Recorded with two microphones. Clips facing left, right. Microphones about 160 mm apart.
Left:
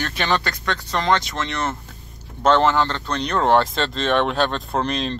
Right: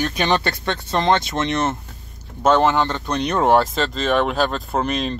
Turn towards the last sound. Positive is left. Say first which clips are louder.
# right 1 dB
turn(degrees=-5)  # may be behind; listen again after turning